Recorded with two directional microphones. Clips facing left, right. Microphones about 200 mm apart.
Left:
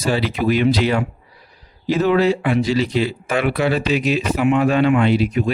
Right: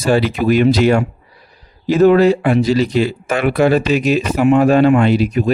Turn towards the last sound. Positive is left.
turn(degrees=-40)  # may be behind; listen again after turning